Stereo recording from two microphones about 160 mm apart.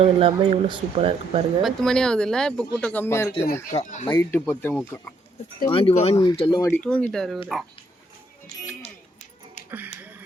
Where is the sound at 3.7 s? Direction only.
45° left (ahead or behind).